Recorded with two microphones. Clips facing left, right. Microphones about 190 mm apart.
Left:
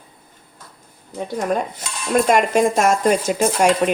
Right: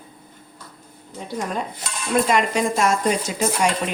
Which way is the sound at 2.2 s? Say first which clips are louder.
Left 4 dB; 50° left (ahead or behind).